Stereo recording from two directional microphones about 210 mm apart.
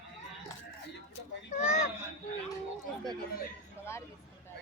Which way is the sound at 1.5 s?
35° left (ahead or behind).